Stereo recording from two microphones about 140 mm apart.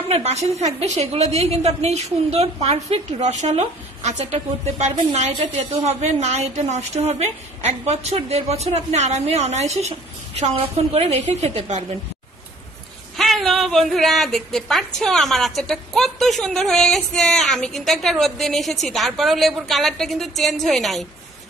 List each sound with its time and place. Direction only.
0.1 s a woman's voice: 50° right (ahead or behind)
13.2 s a woman's voice: centre (ahead or behind)